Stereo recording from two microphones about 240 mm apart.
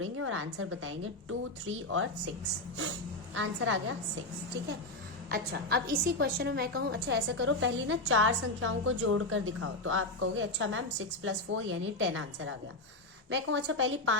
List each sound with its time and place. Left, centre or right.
0.0 s a woman's voice: right
3.3 s a woman's voice: right
5.3 s a woman's voice: right